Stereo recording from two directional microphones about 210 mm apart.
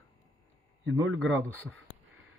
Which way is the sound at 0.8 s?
65° right (ahead or behind).